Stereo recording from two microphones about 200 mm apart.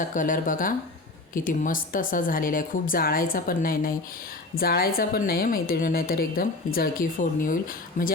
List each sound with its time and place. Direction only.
0.0 s speech: 40° left (ahead or behind)